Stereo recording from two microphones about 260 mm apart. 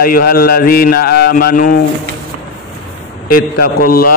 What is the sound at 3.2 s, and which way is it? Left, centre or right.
Speech, left.